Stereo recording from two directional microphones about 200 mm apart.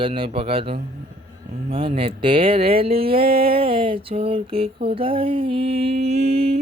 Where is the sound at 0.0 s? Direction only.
25° right (ahead or behind).